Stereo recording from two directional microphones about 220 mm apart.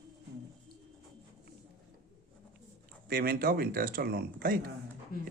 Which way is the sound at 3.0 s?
45° right (ahead or behind).